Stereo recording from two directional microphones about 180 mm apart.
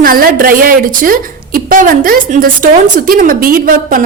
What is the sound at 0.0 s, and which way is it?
A woman's voice, 55° right (ahead or behind).